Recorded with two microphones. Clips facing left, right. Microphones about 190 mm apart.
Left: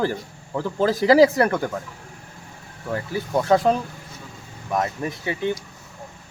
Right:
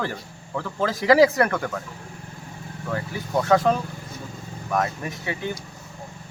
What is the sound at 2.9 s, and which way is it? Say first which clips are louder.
Speech: left 2 dB; 25° left (ahead or behind).